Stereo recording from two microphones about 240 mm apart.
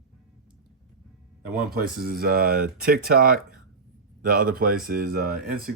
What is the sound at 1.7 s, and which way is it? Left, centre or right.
Speech, right.